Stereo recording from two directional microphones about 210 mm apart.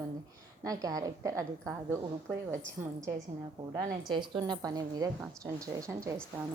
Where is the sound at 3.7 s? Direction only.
20° right (ahead or behind).